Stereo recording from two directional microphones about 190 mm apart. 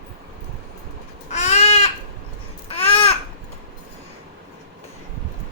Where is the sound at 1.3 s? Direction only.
35° left (ahead or behind).